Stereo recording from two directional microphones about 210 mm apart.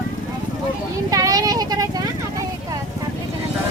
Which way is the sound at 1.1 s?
15° right (ahead or behind).